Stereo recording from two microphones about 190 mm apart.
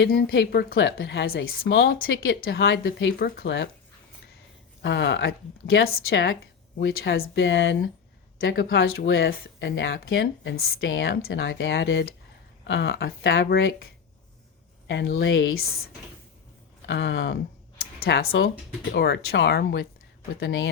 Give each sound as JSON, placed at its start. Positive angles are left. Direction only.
{"t": 0.0, "sound": "a woman's voice", "side_deg": 60}
{"t": 2.2, "sound": "speech", "side_deg": 75}
{"t": 3.2, "sound": "speech", "side_deg": 65}
{"t": 4.8, "sound": "speech", "side_deg": 70}
{"t": 5.8, "sound": "a woman's voice", "side_deg": 55}
{"t": 14.8, "sound": "speech", "side_deg": 70}
{"t": 16.8, "sound": "speech", "side_deg": 65}
{"t": 18.3, "sound": "a woman's voice", "side_deg": 70}